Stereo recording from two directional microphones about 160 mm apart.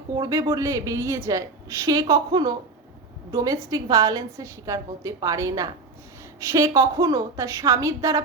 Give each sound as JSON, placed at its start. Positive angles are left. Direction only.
{"t": 0.2, "sound": "a woman's voice", "side_deg": -20}